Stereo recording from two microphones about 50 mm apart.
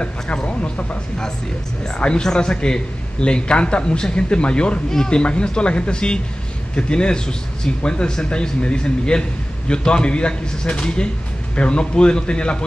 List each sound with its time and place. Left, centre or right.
0.0 s speech: left